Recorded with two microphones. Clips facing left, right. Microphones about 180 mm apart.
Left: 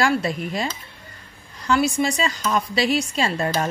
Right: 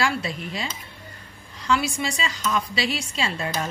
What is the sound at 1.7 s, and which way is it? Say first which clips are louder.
A woman's voice: left 4 dB; 45° left (ahead or behind).